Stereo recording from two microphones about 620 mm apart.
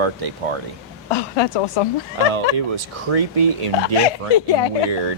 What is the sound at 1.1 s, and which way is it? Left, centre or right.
Speech, left.